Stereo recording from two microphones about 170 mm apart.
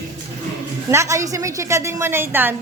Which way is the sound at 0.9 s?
15° right (ahead or behind).